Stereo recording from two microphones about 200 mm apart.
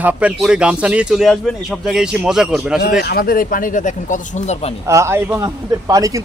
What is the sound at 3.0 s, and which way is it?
Speech, 45° left (ahead or behind).